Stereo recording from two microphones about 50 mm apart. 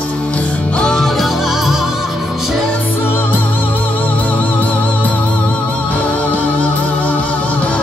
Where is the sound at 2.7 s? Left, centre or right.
Left.